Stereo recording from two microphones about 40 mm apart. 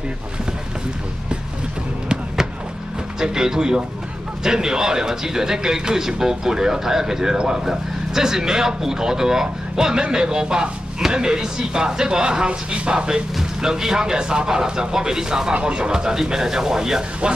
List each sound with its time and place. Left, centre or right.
3.2 s a man's voice: centre